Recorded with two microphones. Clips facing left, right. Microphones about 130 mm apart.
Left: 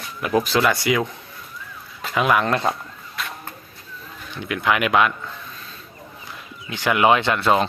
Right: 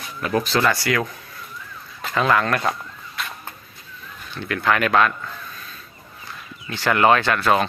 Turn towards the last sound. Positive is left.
turn(degrees=20)  # may be behind; listen again after turning